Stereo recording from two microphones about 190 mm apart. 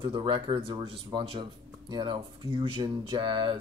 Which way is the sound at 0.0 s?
25° right (ahead or behind).